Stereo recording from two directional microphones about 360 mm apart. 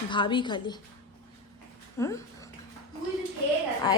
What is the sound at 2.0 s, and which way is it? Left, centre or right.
Speech, centre.